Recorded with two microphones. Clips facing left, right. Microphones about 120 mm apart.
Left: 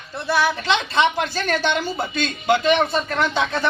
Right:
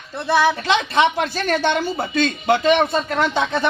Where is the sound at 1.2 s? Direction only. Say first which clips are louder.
Right 2 dB; 20° right (ahead or behind).